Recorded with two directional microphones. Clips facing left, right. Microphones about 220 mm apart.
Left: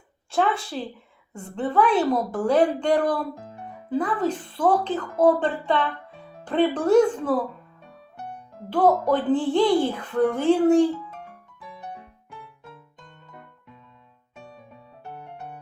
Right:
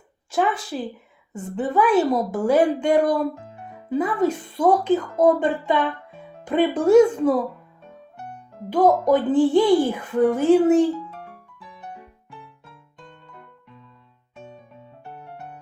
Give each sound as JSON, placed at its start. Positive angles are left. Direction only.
{"t": 0.3, "sound": "speech", "side_deg": -5}
{"t": 8.7, "sound": "speech", "side_deg": -10}